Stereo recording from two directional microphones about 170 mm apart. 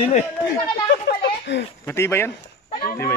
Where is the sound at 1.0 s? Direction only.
80° left.